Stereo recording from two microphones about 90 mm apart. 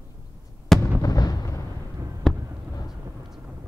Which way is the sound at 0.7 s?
5° left (ahead or behind).